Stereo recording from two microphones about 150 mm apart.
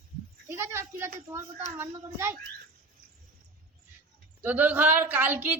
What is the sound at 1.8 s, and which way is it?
Speech, 15° right (ahead or behind).